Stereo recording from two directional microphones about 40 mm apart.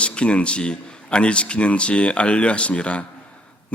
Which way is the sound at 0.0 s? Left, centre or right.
Left.